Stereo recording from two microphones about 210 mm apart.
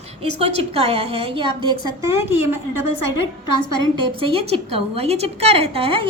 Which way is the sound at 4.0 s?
25° right (ahead or behind).